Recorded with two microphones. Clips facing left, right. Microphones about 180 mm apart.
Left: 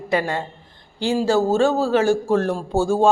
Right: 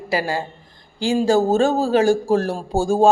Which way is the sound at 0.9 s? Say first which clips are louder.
Right 2 dB; 15° right (ahead or behind).